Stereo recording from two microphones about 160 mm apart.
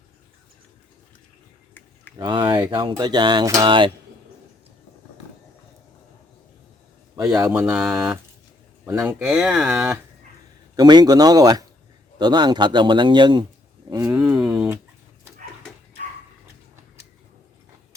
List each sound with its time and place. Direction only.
2.1 s speech: 30° right (ahead or behind)
7.3 s speech: 20° right (ahead or behind)
10.8 s speech: 25° right (ahead or behind)
14.1 s speech: 5° right (ahead or behind)